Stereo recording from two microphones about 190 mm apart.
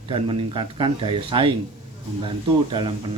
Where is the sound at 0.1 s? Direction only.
25° right (ahead or behind).